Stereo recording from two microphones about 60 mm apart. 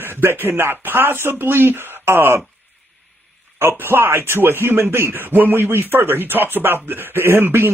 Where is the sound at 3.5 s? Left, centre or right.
Right.